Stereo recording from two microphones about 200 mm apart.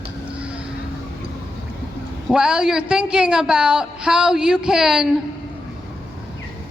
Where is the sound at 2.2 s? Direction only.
5° right (ahead or behind).